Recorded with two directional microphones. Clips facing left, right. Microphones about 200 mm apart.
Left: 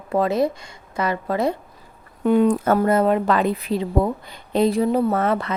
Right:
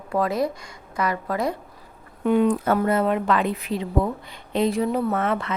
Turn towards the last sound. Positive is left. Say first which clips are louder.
# left 3 dB
turn(degrees=40)  # may be behind; listen again after turning